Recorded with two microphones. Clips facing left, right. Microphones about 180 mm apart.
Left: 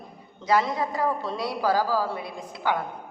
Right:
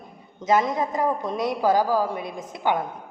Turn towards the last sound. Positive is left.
turn(degrees=-20)  # may be behind; listen again after turning